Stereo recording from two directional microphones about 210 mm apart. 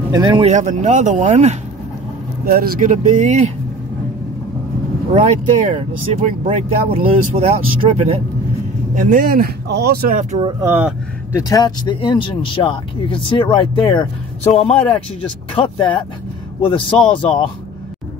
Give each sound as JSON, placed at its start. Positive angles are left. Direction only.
{"t": 0.1, "sound": "speech", "side_deg": -20}
{"t": 0.5, "sound": "speech", "side_deg": -35}
{"t": 2.4, "sound": "speech", "side_deg": -45}
{"t": 5.1, "sound": "speech", "side_deg": -35}
{"t": 8.9, "sound": "speech", "side_deg": -40}
{"t": 10.4, "sound": "speech", "side_deg": -10}
{"t": 11.3, "sound": "speech", "side_deg": 15}